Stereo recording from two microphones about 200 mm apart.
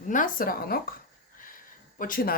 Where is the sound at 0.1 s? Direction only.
45° left (ahead or behind).